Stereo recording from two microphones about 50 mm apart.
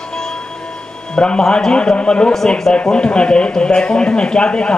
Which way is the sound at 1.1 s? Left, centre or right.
Centre.